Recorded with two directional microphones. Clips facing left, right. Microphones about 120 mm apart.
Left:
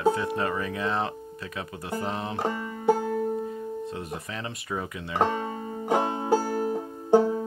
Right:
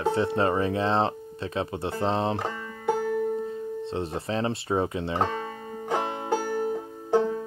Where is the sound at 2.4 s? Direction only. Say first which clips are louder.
Left 4 dB; 20° left (ahead or behind).